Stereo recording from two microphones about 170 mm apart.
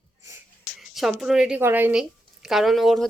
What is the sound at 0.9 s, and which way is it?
Speech, centre (ahead or behind).